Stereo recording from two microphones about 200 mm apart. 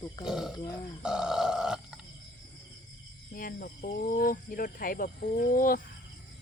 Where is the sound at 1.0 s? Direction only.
5° right (ahead or behind).